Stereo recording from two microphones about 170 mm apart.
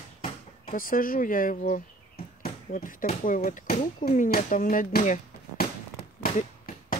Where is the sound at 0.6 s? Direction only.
55° left (ahead or behind).